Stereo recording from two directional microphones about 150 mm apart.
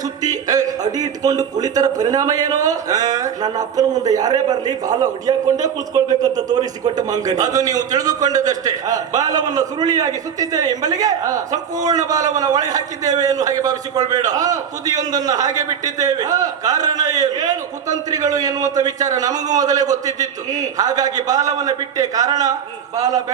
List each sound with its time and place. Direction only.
0.2 s a man's voice: 25° right (ahead or behind)